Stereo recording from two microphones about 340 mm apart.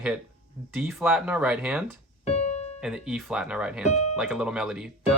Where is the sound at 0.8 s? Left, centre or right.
Centre.